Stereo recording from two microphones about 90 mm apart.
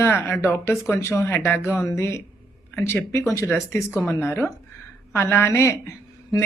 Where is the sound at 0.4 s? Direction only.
30° left (ahead or behind).